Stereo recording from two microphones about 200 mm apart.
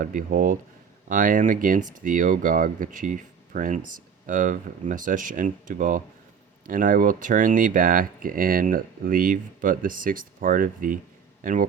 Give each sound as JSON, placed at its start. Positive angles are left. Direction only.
{"t": 0.0, "sound": "speech", "side_deg": -45}